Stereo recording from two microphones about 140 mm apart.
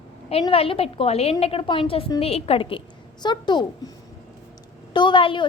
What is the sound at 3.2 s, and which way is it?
Speech, 30° left (ahead or behind).